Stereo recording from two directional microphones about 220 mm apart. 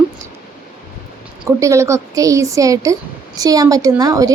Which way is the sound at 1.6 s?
15° right (ahead or behind).